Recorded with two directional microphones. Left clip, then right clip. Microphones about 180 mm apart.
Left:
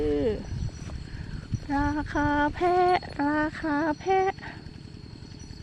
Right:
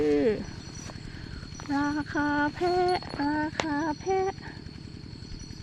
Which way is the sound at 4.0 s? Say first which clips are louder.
Left 4 dB; 25° left (ahead or behind).